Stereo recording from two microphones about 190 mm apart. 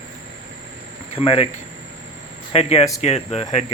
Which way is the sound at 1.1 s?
30° left (ahead or behind).